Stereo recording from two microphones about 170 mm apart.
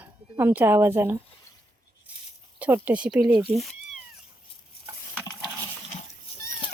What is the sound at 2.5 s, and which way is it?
Speech, 10° right (ahead or behind).